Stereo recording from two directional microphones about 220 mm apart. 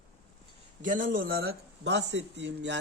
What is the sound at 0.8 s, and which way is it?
Speech, 35° right (ahead or behind).